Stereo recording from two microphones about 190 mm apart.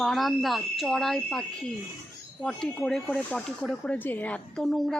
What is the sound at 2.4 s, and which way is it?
Speech, 5° left (ahead or behind).